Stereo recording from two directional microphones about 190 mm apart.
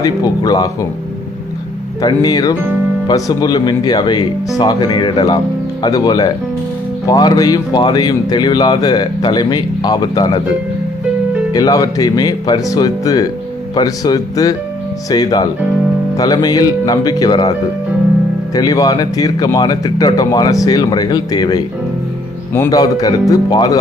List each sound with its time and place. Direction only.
0.0 s speech: 20° left (ahead or behind)
2.0 s speech: 20° left (ahead or behind)
11.5 s speech: 20° left (ahead or behind)
18.5 s speech: 20° left (ahead or behind)